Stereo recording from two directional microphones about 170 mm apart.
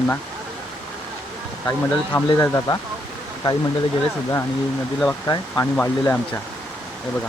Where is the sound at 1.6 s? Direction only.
10° left (ahead or behind).